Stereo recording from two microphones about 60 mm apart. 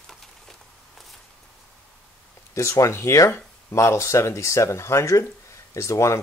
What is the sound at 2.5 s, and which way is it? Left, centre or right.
Speech, left.